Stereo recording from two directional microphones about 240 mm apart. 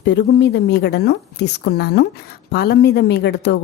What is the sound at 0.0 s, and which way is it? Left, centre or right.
A woman's voice, left.